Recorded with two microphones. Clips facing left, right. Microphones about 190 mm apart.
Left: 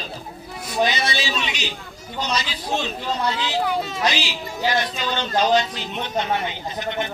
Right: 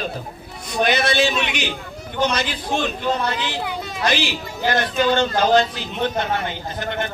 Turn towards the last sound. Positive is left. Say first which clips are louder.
# right 1 dB
turn(degrees=-55)  # may be behind; listen again after turning